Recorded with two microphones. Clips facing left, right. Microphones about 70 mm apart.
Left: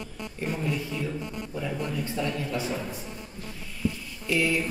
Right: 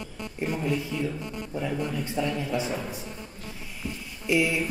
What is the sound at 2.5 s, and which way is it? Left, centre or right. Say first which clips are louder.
Speech: right 1 dB; centre.